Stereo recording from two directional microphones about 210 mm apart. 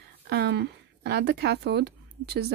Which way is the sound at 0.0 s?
55° right (ahead or behind).